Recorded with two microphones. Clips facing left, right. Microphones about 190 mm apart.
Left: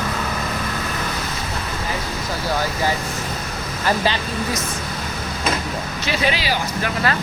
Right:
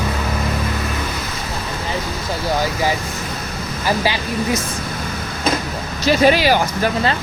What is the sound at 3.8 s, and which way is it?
Speech, 10° right (ahead or behind).